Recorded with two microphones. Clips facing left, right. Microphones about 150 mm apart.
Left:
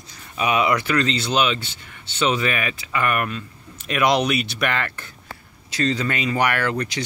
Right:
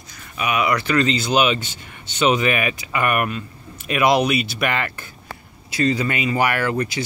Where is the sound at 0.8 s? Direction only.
5° right (ahead or behind).